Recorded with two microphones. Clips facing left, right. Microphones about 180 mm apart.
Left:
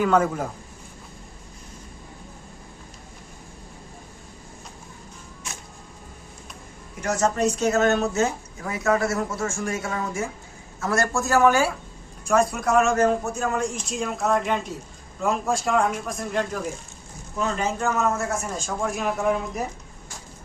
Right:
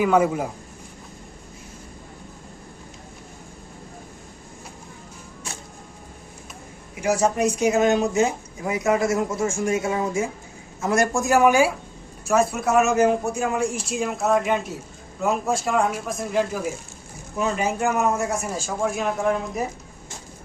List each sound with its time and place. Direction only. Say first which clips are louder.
0.0 s speech: right 2 dB; 10° right (ahead or behind)
6.9 s speech: right 3 dB; 10° right (ahead or behind)